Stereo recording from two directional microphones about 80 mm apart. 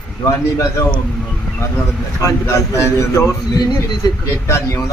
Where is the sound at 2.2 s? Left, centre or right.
Left.